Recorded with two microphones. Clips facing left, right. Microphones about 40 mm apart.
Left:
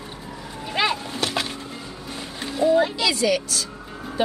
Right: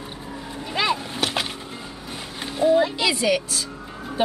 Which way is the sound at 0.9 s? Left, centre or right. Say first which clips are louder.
Right 1 dB; centre.